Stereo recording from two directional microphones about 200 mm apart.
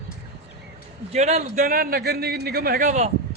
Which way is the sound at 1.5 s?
45° right (ahead or behind).